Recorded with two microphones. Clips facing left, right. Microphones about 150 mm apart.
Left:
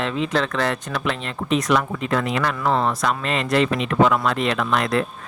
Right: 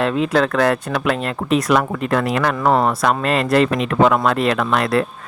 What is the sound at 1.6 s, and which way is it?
Speech, 60° right (ahead or behind).